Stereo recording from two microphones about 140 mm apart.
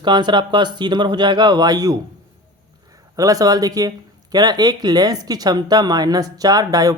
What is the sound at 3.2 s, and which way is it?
Speech, 25° right (ahead or behind).